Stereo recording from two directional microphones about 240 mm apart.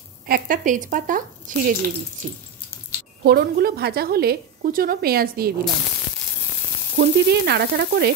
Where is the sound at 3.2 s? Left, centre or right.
Right.